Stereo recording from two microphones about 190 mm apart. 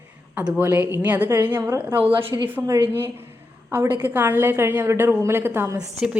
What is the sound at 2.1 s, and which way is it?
Speech, 25° right (ahead or behind).